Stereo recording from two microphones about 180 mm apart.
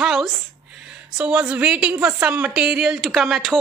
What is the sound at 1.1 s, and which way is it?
A woman's voice, 5° right (ahead or behind).